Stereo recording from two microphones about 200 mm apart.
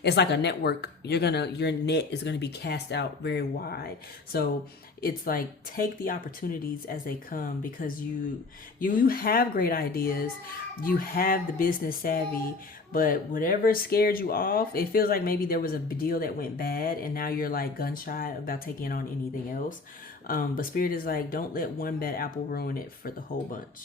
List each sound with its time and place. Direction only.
0.0 s speech: 60° left (ahead or behind)
20.2 s speech: 45° left (ahead or behind)